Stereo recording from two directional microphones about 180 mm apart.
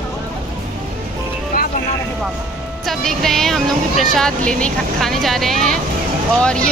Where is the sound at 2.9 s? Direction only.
Centre (ahead or behind).